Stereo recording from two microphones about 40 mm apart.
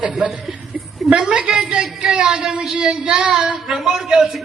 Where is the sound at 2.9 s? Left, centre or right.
Right.